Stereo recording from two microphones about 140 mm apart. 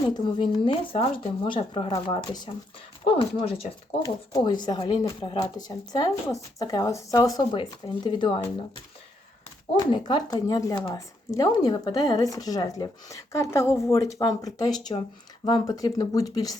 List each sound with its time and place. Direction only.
0.1 s speech: 30° left (ahead or behind)
4.0 s speech: 25° left (ahead or behind)
9.7 s speech: 30° left (ahead or behind)